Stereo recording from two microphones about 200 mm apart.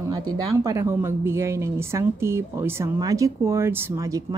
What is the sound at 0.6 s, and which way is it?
Speech, 15° right (ahead or behind).